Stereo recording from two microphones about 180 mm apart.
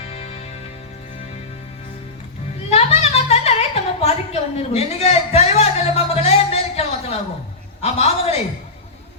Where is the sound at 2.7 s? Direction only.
35° left (ahead or behind).